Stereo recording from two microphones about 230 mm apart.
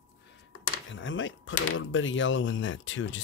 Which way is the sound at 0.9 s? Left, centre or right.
Left.